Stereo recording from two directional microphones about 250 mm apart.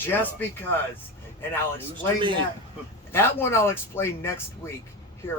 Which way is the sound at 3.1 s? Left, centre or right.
Centre.